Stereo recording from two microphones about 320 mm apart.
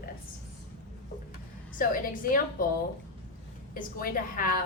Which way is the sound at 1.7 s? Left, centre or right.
Left.